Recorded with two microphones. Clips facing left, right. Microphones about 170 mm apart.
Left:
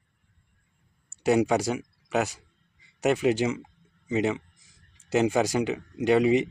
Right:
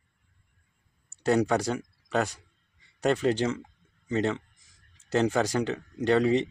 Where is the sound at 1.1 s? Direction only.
10° left (ahead or behind).